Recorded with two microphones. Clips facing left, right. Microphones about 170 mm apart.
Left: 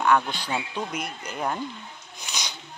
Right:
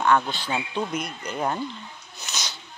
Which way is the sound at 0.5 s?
Centre (ahead or behind).